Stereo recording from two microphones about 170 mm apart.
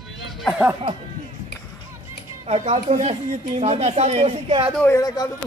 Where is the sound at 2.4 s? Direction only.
40° right (ahead or behind).